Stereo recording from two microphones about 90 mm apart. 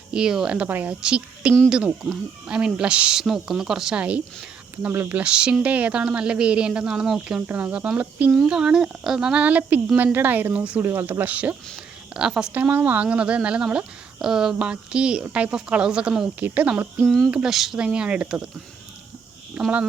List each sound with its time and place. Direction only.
0.1 s speech: 10° right (ahead or behind)
4.9 s speech: 25° right (ahead or behind)
5.2 s speech: 10° right (ahead or behind)
8.3 s speech: 5° right (ahead or behind)
10.8 s speech: 30° right (ahead or behind)
17.3 s speech: 5° right (ahead or behind)
19.6 s speech: 10° right (ahead or behind)